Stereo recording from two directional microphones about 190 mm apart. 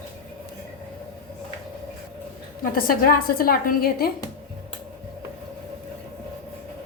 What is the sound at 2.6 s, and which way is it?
Speech, 50° left (ahead or behind).